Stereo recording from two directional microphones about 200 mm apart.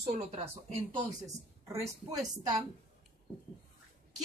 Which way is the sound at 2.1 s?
20° right (ahead or behind).